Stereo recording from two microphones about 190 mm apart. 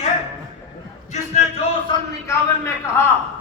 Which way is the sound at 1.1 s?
35° left (ahead or behind).